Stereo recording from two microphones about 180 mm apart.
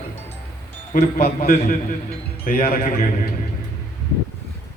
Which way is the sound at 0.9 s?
60° left (ahead or behind).